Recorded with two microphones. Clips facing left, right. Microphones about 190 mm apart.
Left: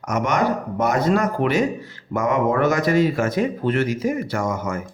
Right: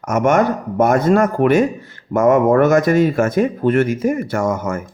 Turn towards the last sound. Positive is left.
turn(degrees=-50)  # may be behind; listen again after turning